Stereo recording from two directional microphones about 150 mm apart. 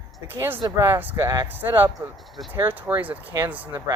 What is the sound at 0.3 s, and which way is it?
Speech, 15° right (ahead or behind).